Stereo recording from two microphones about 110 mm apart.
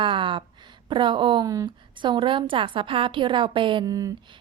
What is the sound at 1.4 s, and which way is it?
Speech, 30° right (ahead or behind).